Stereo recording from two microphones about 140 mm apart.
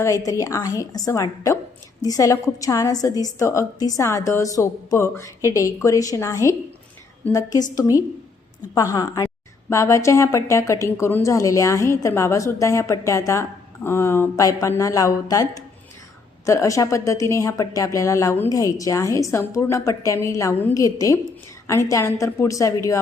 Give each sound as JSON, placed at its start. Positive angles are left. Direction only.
{"t": 0.0, "sound": "a woman's voice", "side_deg": 25}